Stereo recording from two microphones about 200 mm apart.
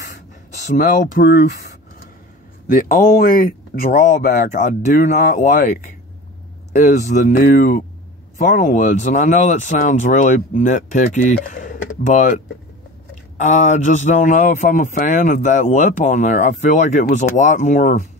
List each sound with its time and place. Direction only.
0.7 s speech: 40° left (ahead or behind)
13.4 s speech: 40° left (ahead or behind)